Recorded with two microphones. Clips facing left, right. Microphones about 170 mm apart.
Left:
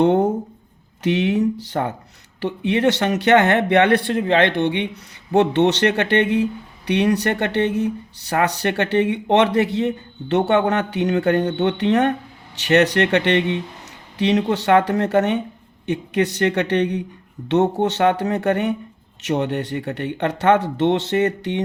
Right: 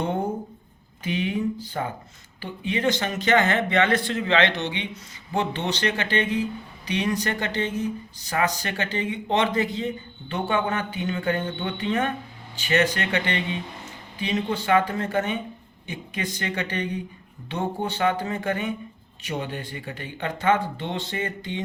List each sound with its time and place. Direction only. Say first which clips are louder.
0.0 s speech: left 10 dB; 85° left